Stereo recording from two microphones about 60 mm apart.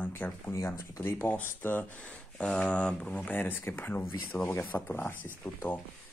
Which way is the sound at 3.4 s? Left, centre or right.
Left.